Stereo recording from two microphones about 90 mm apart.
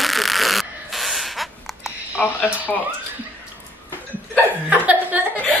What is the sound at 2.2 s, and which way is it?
Speech, 20° left (ahead or behind).